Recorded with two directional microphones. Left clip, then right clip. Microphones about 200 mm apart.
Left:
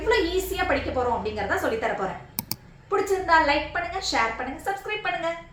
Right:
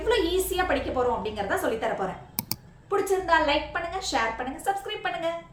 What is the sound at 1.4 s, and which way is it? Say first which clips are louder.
A woman's voice: left 1 dB; 10° right (ahead or behind).